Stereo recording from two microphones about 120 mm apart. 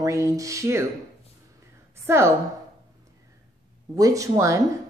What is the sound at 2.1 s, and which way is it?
Speech, 20° right (ahead or behind).